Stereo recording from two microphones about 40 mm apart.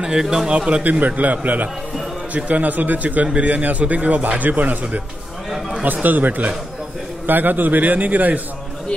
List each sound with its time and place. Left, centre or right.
0.0 s speech: centre
0.5 s speech: right
0.8 s a man's voice: right
6.0 s a man's voice: right